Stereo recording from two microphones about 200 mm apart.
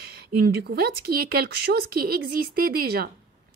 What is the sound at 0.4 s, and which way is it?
A woman's voice, 50° right (ahead or behind).